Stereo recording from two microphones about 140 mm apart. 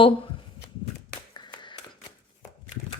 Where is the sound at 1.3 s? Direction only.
30° left (ahead or behind).